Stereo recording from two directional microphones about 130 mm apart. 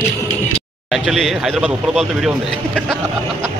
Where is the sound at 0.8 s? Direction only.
Centre (ahead or behind).